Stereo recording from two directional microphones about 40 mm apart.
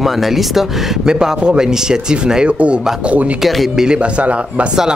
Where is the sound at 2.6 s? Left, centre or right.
Right.